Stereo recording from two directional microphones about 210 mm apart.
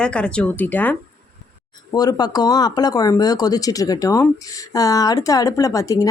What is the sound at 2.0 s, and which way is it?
Speech, 20° left (ahead or behind).